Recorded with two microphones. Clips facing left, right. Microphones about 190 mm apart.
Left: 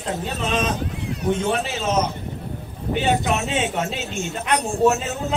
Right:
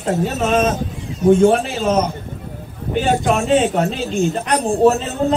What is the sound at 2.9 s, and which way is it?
Speech, 45° right (ahead or behind).